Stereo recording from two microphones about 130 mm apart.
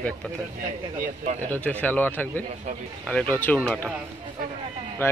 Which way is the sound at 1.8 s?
15° left (ahead or behind).